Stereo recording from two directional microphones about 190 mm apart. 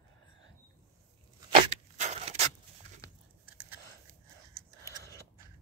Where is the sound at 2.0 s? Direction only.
35° right (ahead or behind).